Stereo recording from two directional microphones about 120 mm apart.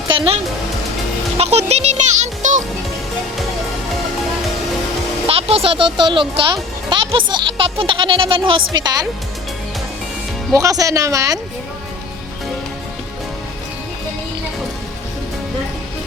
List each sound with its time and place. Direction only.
1.4 s speech: 60° right (ahead or behind); by 2.6 s 90° right
5.2 s speech: 55° right (ahead or behind); by 9.0 s 35° right (ahead or behind)
10.5 s speech: 30° right (ahead or behind)